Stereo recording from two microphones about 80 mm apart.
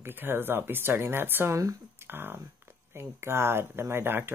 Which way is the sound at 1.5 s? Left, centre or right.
Right.